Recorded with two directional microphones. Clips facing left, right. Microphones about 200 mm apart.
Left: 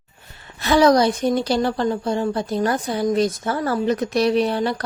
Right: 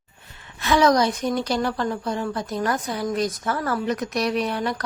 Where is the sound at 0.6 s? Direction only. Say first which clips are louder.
Left 3 dB; 35° left (ahead or behind).